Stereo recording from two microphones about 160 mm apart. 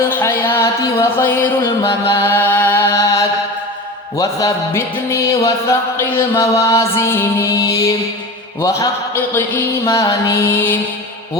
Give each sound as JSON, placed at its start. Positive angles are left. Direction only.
{"t": 0.0, "sound": "music", "side_deg": 15}
{"t": 4.2, "sound": "speech", "side_deg": 20}
{"t": 5.4, "sound": "chant", "side_deg": 15}